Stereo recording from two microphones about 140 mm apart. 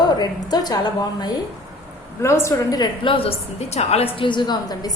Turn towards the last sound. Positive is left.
turn(degrees=30)  # may be behind; listen again after turning